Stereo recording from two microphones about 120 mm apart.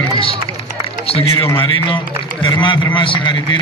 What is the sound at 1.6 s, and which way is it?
A man's voice, 45° left (ahead or behind).